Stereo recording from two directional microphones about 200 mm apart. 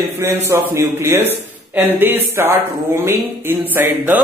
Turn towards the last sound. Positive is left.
turn(degrees=-10)  # may be behind; listen again after turning